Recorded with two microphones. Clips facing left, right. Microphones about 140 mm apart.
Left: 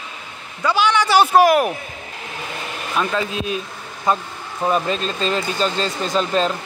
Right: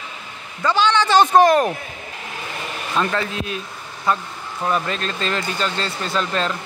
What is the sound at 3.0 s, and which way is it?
Speech, 10° left (ahead or behind).